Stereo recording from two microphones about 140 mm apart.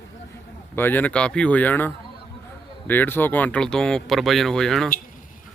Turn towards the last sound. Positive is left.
turn(degrees=5)  # may be behind; listen again after turning